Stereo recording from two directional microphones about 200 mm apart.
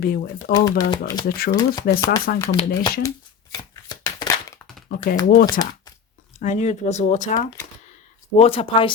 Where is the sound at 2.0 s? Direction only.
50° left (ahead or behind).